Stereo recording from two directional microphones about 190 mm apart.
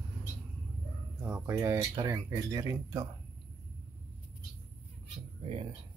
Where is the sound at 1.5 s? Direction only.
10° right (ahead or behind).